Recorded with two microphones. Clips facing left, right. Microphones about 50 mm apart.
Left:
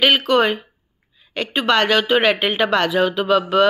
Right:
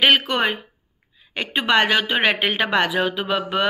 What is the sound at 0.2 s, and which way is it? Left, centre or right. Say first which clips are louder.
Speech: left 5 dB; centre.